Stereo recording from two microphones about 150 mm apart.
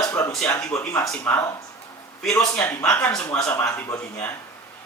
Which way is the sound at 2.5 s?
10° left (ahead or behind).